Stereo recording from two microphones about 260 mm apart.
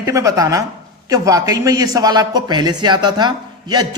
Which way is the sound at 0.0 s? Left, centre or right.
Centre.